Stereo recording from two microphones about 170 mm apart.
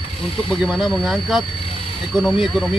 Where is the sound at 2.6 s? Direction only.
Centre (ahead or behind).